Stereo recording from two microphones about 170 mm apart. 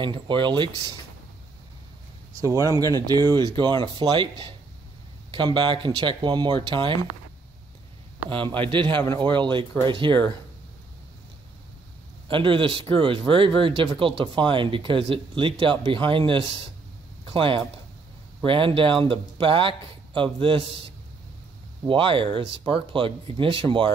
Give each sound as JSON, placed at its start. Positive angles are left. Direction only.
{"t": 0.0, "sound": "speech", "side_deg": -30}
{"t": 2.4, "sound": "speech", "side_deg": -20}
{"t": 8.3, "sound": "speech", "side_deg": -30}
{"t": 12.3, "sound": "speech", "side_deg": -30}